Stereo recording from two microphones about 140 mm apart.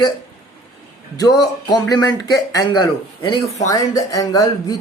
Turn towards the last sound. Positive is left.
turn(degrees=25)  # may be behind; listen again after turning